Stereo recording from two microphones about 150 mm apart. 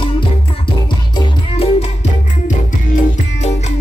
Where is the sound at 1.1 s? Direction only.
40° left (ahead or behind).